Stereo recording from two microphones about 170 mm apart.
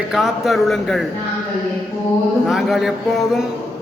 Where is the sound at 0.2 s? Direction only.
Centre (ahead or behind).